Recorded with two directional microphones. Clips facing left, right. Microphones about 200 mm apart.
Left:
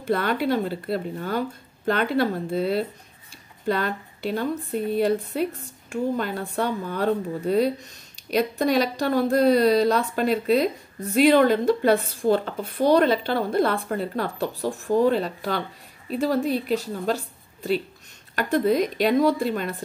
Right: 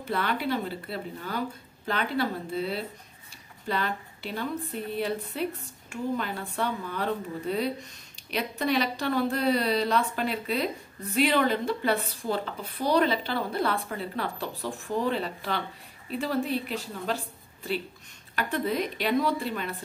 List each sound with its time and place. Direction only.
0.1 s a woman's voice: 45° left (ahead or behind)
18.3 s a woman's voice: 45° left (ahead or behind)